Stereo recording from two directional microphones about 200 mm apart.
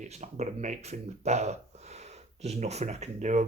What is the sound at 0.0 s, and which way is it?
Speech, 35° right (ahead or behind).